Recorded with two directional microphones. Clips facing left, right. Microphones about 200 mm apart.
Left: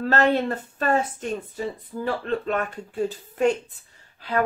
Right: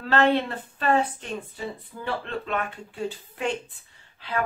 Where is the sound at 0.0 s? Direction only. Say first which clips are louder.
Left 1 dB; 40° left (ahead or behind).